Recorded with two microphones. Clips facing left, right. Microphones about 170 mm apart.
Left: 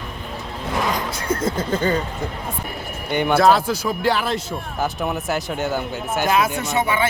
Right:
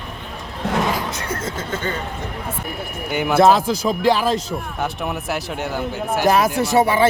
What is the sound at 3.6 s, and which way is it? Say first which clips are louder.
Speech: right 2 dB; 20° right (ahead or behind).